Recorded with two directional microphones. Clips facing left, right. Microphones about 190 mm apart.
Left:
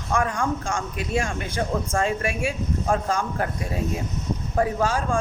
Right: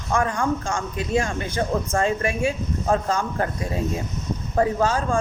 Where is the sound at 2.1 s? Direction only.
10° left (ahead or behind).